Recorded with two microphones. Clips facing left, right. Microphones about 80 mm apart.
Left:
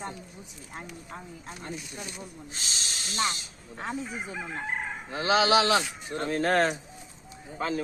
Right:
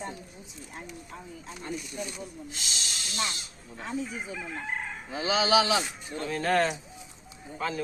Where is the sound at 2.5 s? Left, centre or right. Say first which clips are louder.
Even; left.